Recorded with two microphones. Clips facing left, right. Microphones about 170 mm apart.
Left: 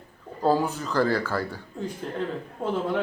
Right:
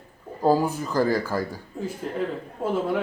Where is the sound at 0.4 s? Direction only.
10° right (ahead or behind).